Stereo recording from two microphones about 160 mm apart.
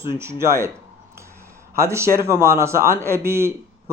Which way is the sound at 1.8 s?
15° right (ahead or behind).